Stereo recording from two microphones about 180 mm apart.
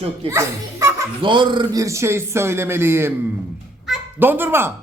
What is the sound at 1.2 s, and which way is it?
A man's voice, 25° right (ahead or behind).